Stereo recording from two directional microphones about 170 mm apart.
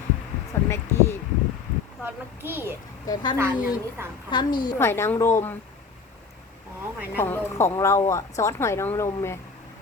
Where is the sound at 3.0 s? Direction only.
25° left (ahead or behind).